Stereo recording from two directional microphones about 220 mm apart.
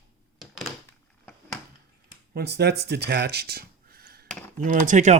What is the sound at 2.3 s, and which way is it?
Speech, 45° right (ahead or behind).